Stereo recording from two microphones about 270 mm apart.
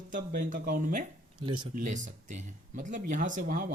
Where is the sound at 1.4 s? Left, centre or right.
Centre.